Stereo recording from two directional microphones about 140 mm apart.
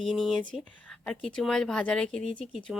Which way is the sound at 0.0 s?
Centre (ahead or behind).